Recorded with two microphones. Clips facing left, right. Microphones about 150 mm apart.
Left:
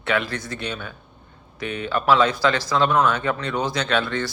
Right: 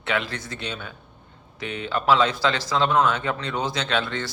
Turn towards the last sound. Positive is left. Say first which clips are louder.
# left 3 dB
turn(degrees=-20)  # may be behind; listen again after turning